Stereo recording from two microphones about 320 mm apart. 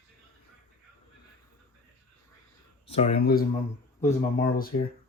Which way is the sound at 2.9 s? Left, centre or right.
Centre.